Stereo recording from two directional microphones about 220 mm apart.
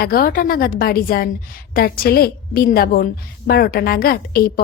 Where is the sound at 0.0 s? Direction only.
40° left (ahead or behind).